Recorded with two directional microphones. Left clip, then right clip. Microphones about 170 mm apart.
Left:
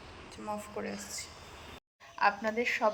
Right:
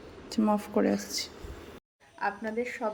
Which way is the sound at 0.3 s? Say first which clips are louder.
Right 19 dB; 55° right (ahead or behind).